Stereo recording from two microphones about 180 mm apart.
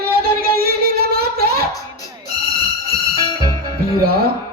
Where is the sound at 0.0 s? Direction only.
60° right (ahead or behind).